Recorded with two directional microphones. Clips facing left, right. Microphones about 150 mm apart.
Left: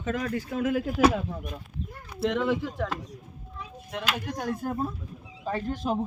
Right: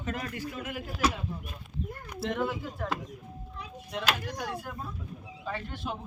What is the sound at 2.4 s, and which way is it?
Speech, 90° left.